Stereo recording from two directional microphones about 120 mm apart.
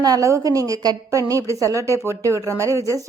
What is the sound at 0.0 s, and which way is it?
A woman's voice, 30° right (ahead or behind).